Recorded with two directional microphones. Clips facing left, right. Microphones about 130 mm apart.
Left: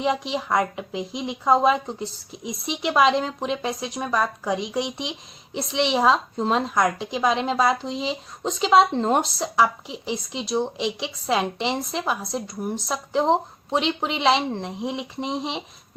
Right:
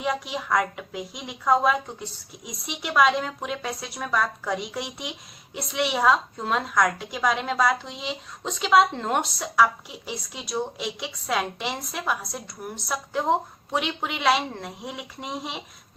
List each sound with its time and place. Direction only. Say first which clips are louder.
0.0 s a woman's voice: left 4 dB; 25° left (ahead or behind)